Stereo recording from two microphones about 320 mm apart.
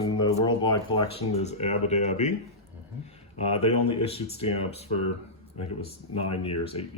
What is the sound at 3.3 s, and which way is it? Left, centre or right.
Speech, centre.